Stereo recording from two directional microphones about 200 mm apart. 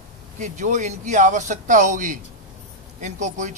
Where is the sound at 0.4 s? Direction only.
35° right (ahead or behind).